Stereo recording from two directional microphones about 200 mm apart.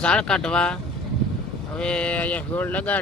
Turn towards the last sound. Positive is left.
turn(degrees=10)  # may be behind; listen again after turning